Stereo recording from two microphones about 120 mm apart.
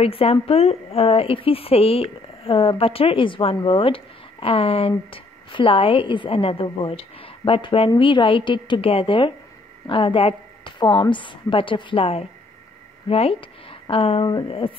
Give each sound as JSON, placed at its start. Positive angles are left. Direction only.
{"t": 0.0, "sound": "speech", "side_deg": 55}